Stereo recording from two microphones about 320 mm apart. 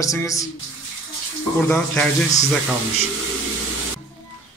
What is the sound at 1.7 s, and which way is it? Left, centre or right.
Speech, centre.